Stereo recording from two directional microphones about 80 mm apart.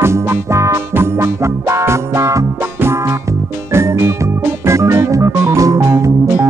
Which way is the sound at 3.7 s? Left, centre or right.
Right.